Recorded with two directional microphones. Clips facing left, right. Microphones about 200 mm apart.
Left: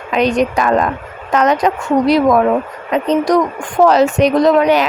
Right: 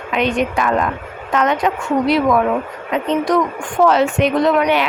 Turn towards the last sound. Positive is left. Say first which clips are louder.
# left 4 dB
turn(degrees=40)  # may be behind; listen again after turning